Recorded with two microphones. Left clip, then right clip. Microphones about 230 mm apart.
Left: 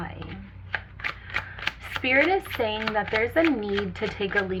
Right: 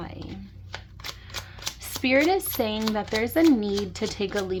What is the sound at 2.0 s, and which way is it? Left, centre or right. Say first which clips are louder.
Speech: even; right.